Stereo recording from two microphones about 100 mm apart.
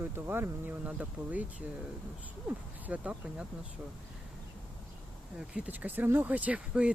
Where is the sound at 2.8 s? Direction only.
10° right (ahead or behind).